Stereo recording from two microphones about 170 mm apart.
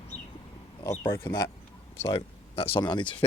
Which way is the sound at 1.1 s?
15° left (ahead or behind).